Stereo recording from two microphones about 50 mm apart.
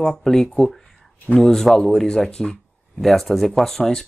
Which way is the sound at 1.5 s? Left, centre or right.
Centre.